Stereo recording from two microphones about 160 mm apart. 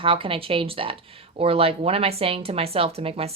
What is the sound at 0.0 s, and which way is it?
Speech, 35° right (ahead or behind).